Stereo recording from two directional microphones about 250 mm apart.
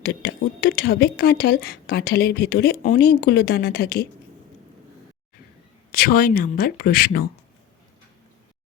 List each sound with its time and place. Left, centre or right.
0.0 s speech: left
5.9 s speech: left